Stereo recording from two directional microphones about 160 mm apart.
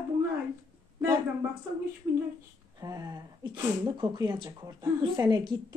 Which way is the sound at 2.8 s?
20° right (ahead or behind).